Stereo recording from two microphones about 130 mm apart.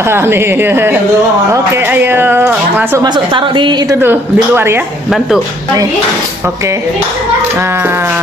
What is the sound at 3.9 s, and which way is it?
Speech, 15° right (ahead or behind).